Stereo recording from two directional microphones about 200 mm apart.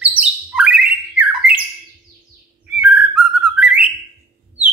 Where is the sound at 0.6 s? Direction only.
5° right (ahead or behind).